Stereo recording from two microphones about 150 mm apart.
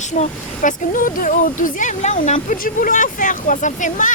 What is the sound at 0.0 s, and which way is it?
Speech, 50° left (ahead or behind).